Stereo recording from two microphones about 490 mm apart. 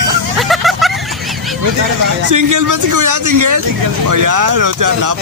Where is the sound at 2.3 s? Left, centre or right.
Right.